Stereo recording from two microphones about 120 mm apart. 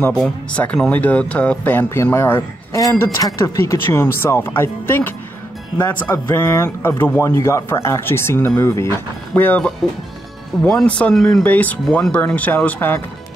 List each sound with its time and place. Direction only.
0.5 s a man's voice: 10° left (ahead or behind)
11.4 s speech: 15° left (ahead or behind)